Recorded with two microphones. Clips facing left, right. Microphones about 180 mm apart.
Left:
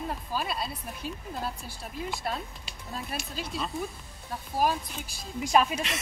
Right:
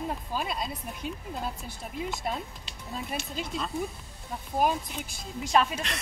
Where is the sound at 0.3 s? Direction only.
20° right (ahead or behind).